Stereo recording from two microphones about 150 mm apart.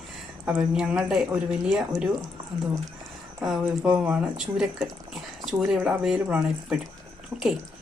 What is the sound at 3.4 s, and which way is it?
A woman's voice, 5° right (ahead or behind).